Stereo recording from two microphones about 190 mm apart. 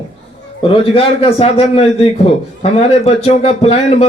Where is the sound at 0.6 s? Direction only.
30° left (ahead or behind).